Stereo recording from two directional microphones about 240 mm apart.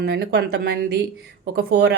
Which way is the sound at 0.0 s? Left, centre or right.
Right.